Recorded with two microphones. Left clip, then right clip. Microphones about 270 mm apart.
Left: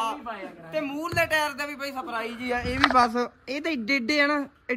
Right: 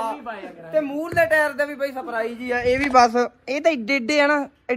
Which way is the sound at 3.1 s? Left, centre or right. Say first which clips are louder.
Right 7 dB; centre.